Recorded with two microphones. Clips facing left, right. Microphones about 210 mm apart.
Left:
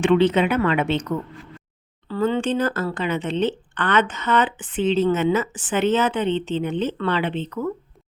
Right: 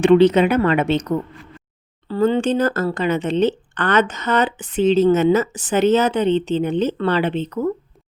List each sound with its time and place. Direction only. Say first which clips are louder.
0.0 s speech: right 5 dB; 40° right (ahead or behind)